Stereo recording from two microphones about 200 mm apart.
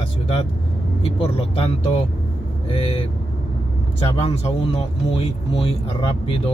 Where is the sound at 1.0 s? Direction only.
30° left (ahead or behind).